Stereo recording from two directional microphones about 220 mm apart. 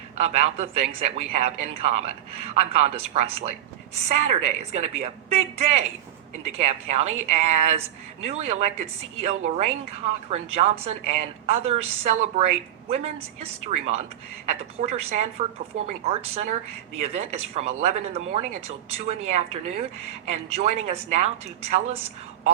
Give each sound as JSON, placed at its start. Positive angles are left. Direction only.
{"t": 0.2, "sound": "speech", "side_deg": -30}